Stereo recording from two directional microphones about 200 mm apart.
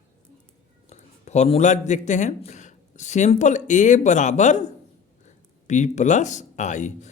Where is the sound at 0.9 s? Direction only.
35° left (ahead or behind).